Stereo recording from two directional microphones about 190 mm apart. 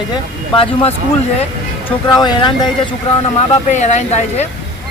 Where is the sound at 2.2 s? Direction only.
25° left (ahead or behind).